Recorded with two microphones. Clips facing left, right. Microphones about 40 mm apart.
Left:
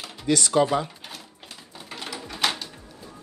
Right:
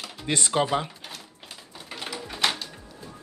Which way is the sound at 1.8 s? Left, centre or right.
Centre.